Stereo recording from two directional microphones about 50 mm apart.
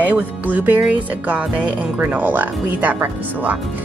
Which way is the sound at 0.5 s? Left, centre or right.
Right.